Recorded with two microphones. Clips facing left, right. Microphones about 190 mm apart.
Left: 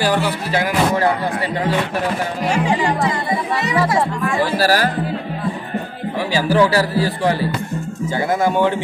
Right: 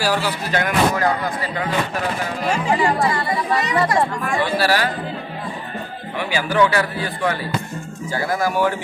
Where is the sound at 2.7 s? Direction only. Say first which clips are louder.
Even; 20° left (ahead or behind).